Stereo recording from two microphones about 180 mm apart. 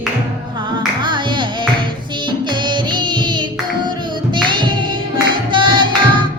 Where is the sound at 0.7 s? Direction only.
25° right (ahead or behind).